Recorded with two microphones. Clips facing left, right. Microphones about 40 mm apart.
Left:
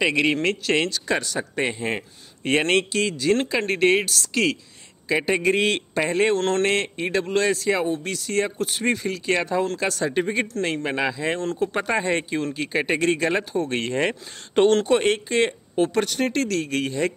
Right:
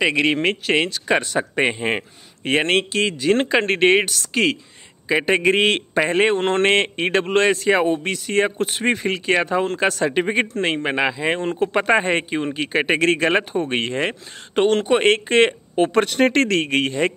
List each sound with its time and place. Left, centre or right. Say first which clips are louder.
0.0 s speech: right 2 dB; centre
1.1 s speech: right 7 dB; right
2.4 s speech: right 2 dB; centre
2.8 s speech: right 3 dB; right
5.0 s speech: right 3 dB; centre
5.3 s speech: right 4 dB; right
5.6 s speech: right 4 dB; right
13.7 s speech: right 1 dB; centre
15.0 s speech: right 5 dB; right
16.7 s speech: right 4 dB; right